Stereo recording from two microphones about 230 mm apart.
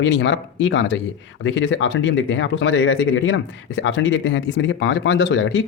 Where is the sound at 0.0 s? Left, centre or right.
Left.